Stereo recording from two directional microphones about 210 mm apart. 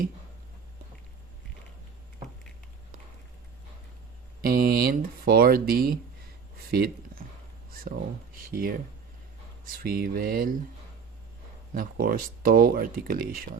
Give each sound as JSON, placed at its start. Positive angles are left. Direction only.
{"t": 4.4, "sound": "speech", "side_deg": -45}
{"t": 6.7, "sound": "a sound", "side_deg": -45}
{"t": 8.4, "sound": "speech", "side_deg": -45}
{"t": 11.7, "sound": "speech", "side_deg": -40}